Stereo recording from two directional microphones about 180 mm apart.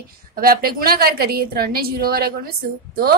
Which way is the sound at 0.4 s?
55° right (ahead or behind).